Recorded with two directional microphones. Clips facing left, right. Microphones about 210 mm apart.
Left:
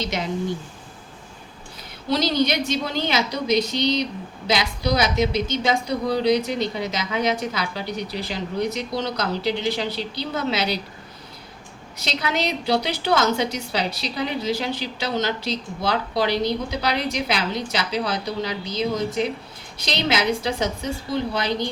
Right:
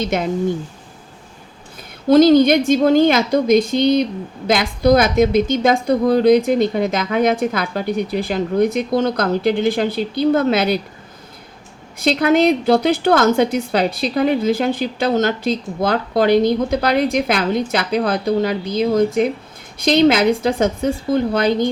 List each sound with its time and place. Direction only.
0.0 s a woman's voice: 50° right (ahead or behind)
2.0 s a woman's voice: 50° right (ahead or behind)
11.9 s a woman's voice: 50° right (ahead or behind)